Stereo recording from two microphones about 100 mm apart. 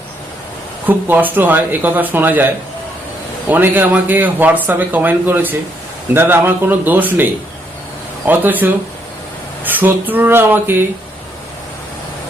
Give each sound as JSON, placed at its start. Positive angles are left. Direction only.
{"t": 0.9, "sound": "a man's voice", "side_deg": -20}
{"t": 3.5, "sound": "a man's voice", "side_deg": -20}